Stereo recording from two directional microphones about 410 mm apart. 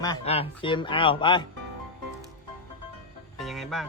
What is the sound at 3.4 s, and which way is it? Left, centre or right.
Music, centre.